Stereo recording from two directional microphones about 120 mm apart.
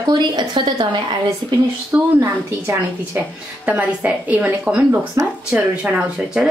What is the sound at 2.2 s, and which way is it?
A woman's voice, 20° right (ahead or behind).